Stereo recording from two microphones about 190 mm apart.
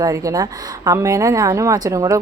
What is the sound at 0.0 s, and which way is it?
A woman's voice, 20° right (ahead or behind).